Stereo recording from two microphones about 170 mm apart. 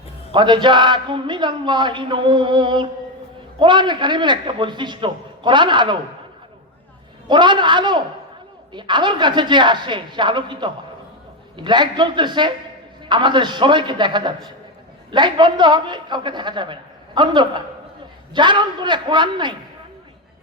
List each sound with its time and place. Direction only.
0.3 s a man's voice: 25° right (ahead or behind)
7.3 s a man's voice: 25° right (ahead or behind)